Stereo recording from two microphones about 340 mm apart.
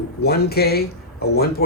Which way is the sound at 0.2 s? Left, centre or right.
Left.